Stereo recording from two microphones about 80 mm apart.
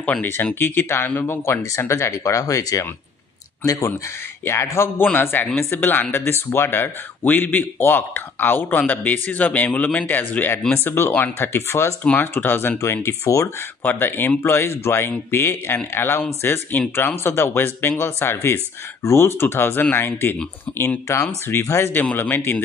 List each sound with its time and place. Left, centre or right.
0.0 s speech: centre; by 3.9 s left
4.5 s speech: left
12.0 s speech: left
13.8 s speech: left